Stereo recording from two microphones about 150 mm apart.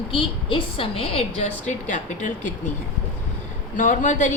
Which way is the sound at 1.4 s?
55° left (ahead or behind).